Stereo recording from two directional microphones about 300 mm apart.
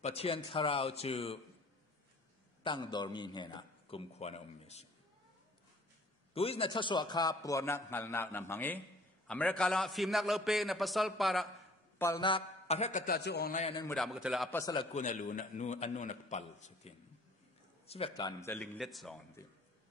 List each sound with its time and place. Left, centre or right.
0.0 s a man's voice: centre
2.6 s a man's voice: centre
6.3 s a man's voice: centre
12.0 s a man's voice: centre
13.8 s a man's voice: centre
14.6 s a man's voice: centre